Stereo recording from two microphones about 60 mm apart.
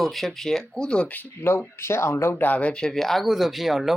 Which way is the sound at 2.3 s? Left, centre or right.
Left.